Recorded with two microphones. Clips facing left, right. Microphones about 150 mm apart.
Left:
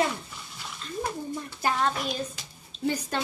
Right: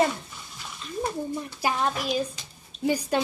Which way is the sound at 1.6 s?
5° right (ahead or behind).